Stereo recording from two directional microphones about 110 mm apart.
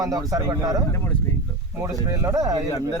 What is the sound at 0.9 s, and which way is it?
Speech, 20° left (ahead or behind).